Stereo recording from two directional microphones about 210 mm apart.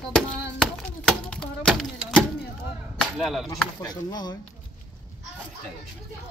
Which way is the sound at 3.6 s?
15° left (ahead or behind).